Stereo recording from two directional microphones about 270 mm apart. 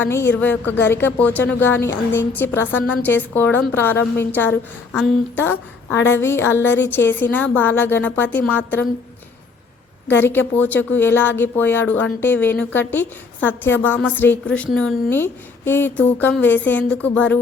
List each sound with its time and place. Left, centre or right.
0.0 s speech: centre
10.1 s a woman's voice: centre